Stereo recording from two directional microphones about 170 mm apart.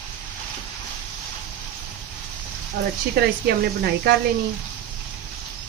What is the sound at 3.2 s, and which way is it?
Speech, 70° right (ahead or behind).